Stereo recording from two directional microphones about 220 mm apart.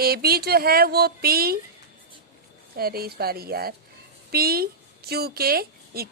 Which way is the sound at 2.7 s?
45° right (ahead or behind).